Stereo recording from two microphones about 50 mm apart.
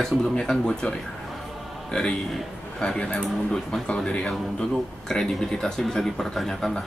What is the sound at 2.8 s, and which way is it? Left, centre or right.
Speech, left.